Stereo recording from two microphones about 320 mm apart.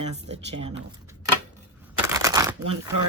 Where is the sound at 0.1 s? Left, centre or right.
Centre.